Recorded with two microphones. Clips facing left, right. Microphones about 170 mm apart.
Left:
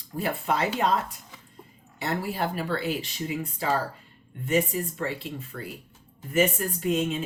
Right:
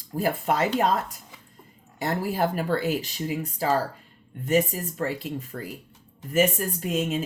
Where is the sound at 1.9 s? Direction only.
45° right (ahead or behind).